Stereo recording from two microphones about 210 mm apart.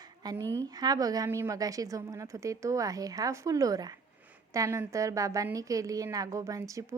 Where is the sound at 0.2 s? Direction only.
20° right (ahead or behind).